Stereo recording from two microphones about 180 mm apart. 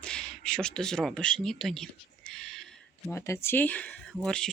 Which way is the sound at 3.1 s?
15° left (ahead or behind).